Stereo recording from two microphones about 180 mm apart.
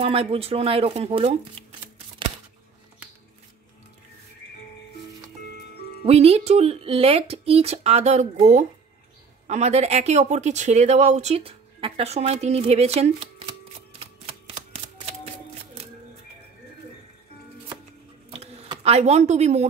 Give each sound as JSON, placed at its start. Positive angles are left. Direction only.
{"t": 0.0, "sound": "speech", "side_deg": -30}
{"t": 6.0, "sound": "speech", "side_deg": -35}
{"t": 18.3, "sound": "a sound", "side_deg": -35}